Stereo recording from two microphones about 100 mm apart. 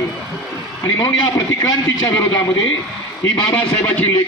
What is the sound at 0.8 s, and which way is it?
Speech, 40° left (ahead or behind).